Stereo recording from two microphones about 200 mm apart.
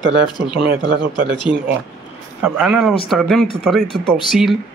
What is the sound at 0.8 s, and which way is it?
Speech, 20° left (ahead or behind).